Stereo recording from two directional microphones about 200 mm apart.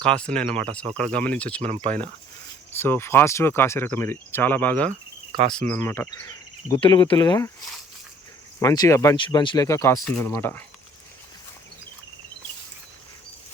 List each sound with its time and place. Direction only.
0.0 s speech: 5° left (ahead or behind)
1.6 s speech: 25° right (ahead or behind)
2.7 s speech: 10° left (ahead or behind)
8.5 s speech: 15° left (ahead or behind)